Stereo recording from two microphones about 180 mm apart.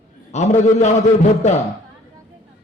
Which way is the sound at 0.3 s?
40° left (ahead or behind).